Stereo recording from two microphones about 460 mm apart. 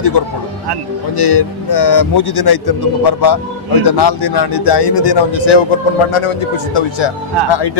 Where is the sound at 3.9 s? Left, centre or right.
Left.